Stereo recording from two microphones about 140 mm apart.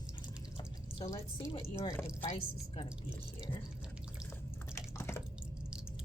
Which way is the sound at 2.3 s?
40° left (ahead or behind).